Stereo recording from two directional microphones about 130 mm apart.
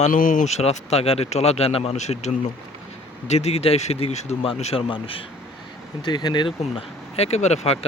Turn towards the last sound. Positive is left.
turn(degrees=55)  # may be behind; listen again after turning